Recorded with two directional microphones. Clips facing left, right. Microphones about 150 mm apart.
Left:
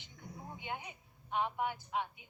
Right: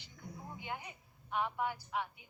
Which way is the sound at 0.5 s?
20° left (ahead or behind).